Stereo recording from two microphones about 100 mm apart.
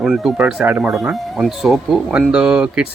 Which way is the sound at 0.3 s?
10° right (ahead or behind).